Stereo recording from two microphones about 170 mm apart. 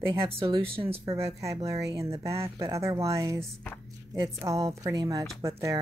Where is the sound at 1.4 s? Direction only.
20° right (ahead or behind).